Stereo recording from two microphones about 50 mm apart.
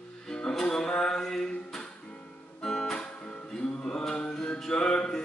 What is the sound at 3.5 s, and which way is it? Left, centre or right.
Music, centre.